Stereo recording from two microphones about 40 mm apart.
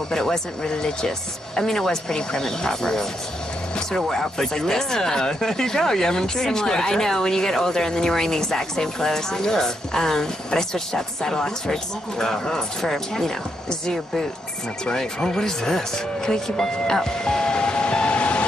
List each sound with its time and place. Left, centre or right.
0.1 s speech: centre
4.1 s speech: centre; by 18.4 s left